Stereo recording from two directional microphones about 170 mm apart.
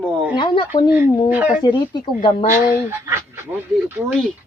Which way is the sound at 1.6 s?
25° left (ahead or behind).